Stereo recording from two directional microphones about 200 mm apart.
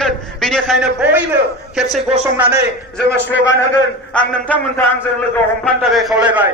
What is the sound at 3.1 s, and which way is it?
Speech, 60° left (ahead or behind).